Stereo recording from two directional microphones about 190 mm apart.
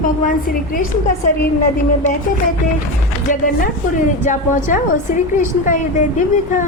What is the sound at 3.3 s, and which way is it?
A woman's voice, 45° left (ahead or behind).